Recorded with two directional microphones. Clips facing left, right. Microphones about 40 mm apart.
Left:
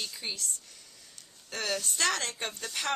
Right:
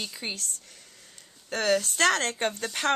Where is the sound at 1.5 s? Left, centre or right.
Right.